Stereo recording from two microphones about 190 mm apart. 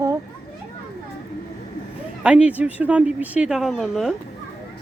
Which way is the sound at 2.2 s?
5° right (ahead or behind).